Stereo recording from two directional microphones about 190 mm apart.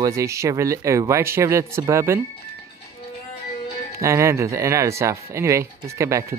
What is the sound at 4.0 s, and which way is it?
Speech, 15° right (ahead or behind).